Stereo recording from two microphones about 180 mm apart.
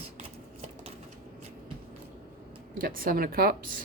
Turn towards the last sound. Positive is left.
turn(degrees=-55)  # may be behind; listen again after turning